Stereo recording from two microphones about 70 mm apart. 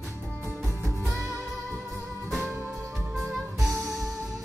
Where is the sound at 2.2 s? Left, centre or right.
Centre.